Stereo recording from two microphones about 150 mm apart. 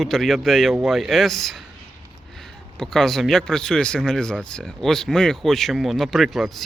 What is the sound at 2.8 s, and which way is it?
Speech, centre (ahead or behind).